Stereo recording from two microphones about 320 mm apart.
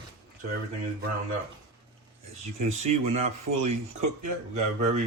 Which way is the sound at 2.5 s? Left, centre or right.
Right.